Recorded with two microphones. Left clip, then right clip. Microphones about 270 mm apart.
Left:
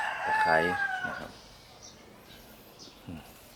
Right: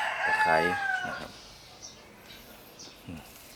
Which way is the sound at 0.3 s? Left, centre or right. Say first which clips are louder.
Even; centre.